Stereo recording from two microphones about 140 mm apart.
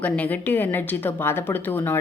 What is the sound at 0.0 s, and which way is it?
A woman's voice, 10° left (ahead or behind).